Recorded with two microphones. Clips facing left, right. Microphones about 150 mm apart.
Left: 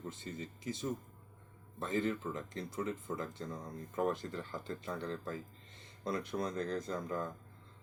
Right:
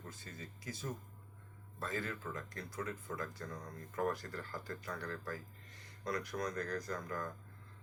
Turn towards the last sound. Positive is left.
turn(degrees=25)  # may be behind; listen again after turning